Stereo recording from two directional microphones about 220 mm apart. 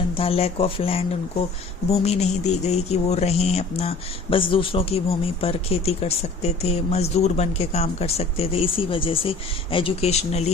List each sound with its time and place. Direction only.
0.2 s speech: 25° left (ahead or behind)